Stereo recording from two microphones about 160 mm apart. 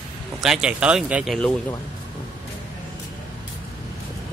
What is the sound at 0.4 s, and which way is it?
Speech, 5° right (ahead or behind).